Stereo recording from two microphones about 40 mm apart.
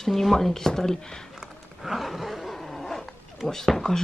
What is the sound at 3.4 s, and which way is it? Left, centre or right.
Speech, centre.